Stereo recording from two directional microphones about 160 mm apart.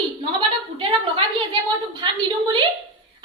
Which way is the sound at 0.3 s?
35° right (ahead or behind).